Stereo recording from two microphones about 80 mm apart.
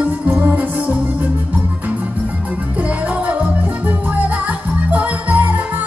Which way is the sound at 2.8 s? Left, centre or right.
Centre.